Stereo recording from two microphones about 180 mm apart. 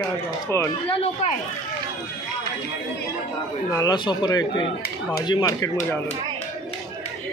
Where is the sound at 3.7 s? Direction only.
20° left (ahead or behind).